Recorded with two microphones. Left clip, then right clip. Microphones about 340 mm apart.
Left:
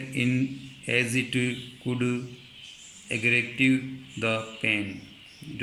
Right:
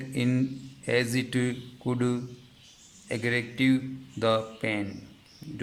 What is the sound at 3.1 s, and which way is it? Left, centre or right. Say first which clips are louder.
A man's voice: left 5 dB; right.